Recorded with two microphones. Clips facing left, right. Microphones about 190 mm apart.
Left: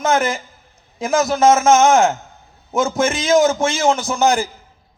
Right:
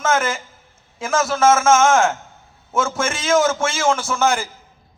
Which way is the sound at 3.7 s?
35° left (ahead or behind).